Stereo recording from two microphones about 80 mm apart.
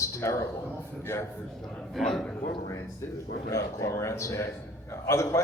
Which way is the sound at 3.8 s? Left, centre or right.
Left.